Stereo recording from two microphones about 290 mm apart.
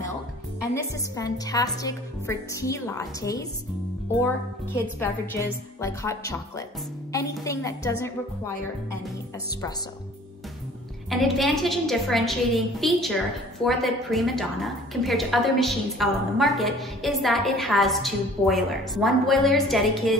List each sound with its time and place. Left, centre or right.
1.1 s a woman's voice: centre
5.0 s a woman's voice: centre
11.1 s a woman's voice: centre